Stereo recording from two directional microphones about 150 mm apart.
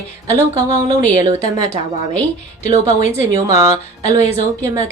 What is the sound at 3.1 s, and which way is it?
A woman's voice, 20° right (ahead or behind).